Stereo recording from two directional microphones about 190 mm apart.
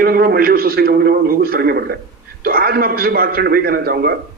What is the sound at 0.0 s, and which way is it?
A man's voice, 55° right (ahead or behind).